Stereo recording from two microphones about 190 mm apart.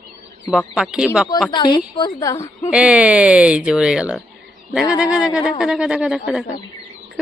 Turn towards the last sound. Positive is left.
turn(degrees=-5)  # may be behind; listen again after turning